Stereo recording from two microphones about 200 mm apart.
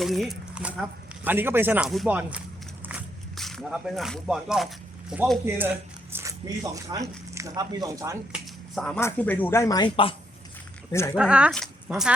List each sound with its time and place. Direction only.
0.0 s speech: centre (ahead or behind)
8.7 s speech: 5° left (ahead or behind); by 10.2 s 25° left (ahead or behind)
10.9 s speech: 15° left (ahead or behind)
11.2 s speech: 5° right (ahead or behind)